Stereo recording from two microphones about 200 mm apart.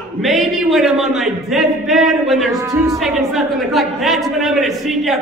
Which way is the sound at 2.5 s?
15° right (ahead or behind).